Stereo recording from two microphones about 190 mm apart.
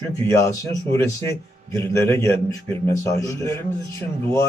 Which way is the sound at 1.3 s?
15° left (ahead or behind).